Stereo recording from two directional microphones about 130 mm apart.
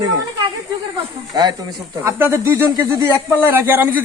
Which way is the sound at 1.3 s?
30° right (ahead or behind).